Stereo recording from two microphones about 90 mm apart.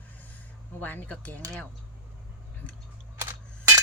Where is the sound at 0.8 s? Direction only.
20° left (ahead or behind).